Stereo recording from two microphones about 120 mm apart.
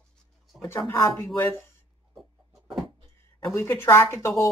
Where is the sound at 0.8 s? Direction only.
20° left (ahead or behind).